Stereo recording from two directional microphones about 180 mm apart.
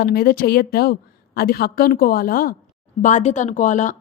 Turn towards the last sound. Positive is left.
turn(degrees=45)  # may be behind; listen again after turning